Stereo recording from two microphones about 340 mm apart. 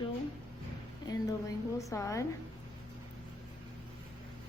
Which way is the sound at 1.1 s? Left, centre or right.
Centre.